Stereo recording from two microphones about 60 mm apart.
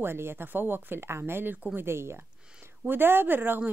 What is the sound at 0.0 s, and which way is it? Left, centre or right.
Speech, right.